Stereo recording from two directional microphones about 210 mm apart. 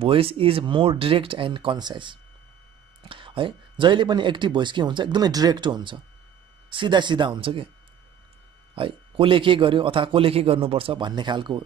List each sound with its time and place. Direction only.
0.0 s speech: 25° right (ahead or behind)
8.7 s speech: 25° right (ahead or behind)